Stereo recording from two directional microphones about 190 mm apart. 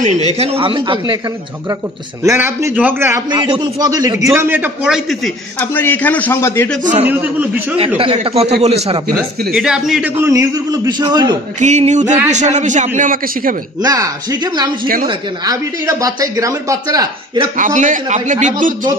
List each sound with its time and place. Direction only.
0.4 s speech: 30° right (ahead or behind)
2.2 s a man's voice: 15° right (ahead or behind)
5.6 s a man's voice: 10° left (ahead or behind)
6.8 s a man's voice: 40° right (ahead or behind)
7.1 s a man's voice: 10° right (ahead or behind)
8.0 s speech: 30° right (ahead or behind)
9.5 s a man's voice: centre (ahead or behind)
10.1 s speech: 15° right (ahead or behind)
11.6 s a man's voice: 35° right (ahead or behind)
13.8 s speech: 20° right (ahead or behind)
17.6 s a man's voice: 40° right (ahead or behind)